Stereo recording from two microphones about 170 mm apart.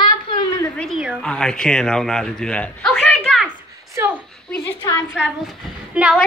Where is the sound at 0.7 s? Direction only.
Centre (ahead or behind).